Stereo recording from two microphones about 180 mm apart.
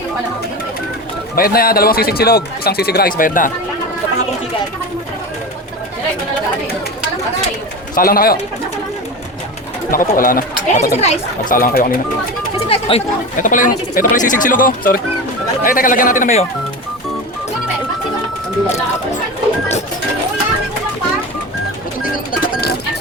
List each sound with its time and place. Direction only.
1.4 s speech: 55° left (ahead or behind)
7.9 s speech: 55° left (ahead or behind)
9.9 s speech: 50° left (ahead or behind)
12.6 s chatter: 30° left (ahead or behind)
13.4 s speech: 45° left (ahead or behind)